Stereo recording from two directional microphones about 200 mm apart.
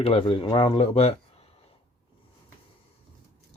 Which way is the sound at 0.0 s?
30° left (ahead or behind).